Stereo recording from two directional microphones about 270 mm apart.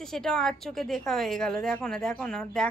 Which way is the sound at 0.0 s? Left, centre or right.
Centre.